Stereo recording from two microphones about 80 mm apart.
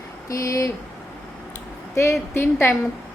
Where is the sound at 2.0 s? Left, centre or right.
Left.